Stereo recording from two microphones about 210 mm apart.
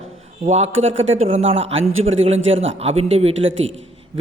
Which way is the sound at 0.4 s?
30° right (ahead or behind).